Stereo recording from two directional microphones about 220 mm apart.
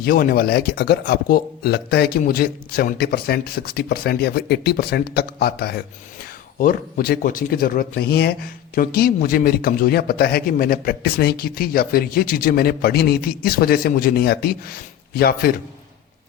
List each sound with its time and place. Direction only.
0.0 s speech: 40° left (ahead or behind)